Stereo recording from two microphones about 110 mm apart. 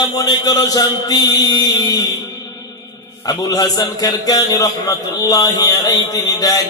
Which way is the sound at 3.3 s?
35° left (ahead or behind).